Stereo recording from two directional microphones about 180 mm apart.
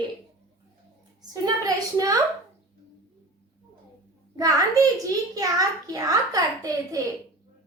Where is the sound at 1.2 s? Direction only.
20° right (ahead or behind).